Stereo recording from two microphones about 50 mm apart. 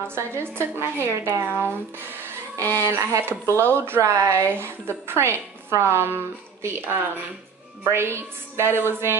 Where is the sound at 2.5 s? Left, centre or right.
Right.